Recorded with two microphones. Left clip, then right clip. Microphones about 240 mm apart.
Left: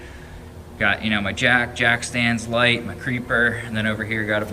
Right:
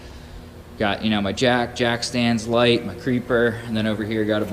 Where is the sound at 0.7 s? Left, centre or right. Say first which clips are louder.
Left 2 dB; centre.